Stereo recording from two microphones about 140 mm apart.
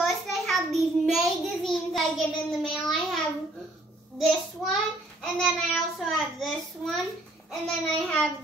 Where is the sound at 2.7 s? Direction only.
Centre (ahead or behind).